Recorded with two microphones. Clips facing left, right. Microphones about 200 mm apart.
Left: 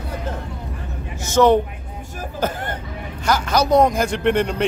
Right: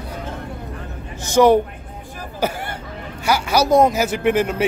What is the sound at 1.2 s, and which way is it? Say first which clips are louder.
Speech: right 1 dB; 10° right (ahead or behind).